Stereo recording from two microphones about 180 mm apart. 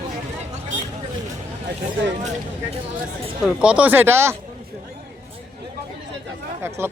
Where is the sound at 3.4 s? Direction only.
5° right (ahead or behind).